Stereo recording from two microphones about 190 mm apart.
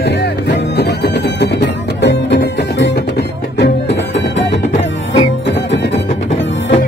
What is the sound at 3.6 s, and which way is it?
Music, 70° left (ahead or behind).